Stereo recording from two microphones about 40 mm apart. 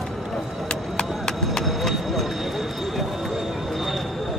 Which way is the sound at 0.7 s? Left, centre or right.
Centre.